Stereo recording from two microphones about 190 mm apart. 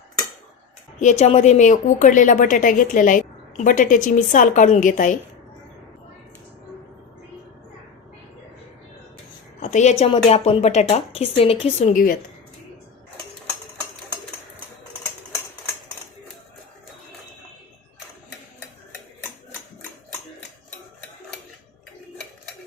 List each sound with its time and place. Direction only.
0.9 s speech: 40° left (ahead or behind)
9.6 s a sound: 40° left (ahead or behind)
10.0 s a woman's voice: 35° left (ahead or behind)